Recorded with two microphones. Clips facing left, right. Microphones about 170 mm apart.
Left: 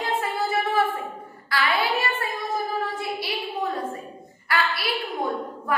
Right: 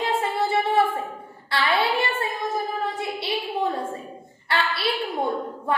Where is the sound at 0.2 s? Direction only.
30° right (ahead or behind).